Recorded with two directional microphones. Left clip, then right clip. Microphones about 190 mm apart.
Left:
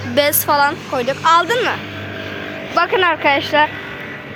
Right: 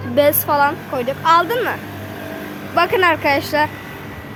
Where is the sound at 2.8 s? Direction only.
15° right (ahead or behind).